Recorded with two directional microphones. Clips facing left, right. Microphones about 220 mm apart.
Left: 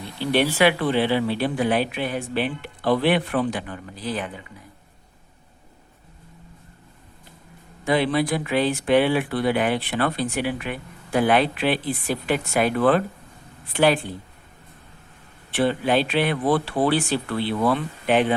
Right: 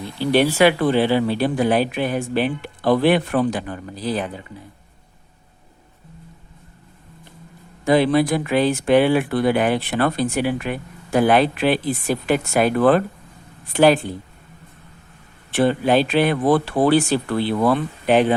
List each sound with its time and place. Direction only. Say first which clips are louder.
0.2 s speech: right 4 dB; 40° right (ahead or behind)
7.9 s speech: right 5 dB; 40° right (ahead or behind)
15.5 s speech: right 4 dB; 45° right (ahead or behind)